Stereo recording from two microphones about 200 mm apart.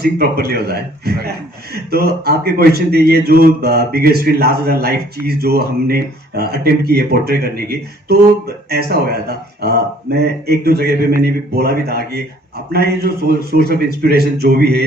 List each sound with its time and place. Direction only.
0.0 s speech: 50° right (ahead or behind)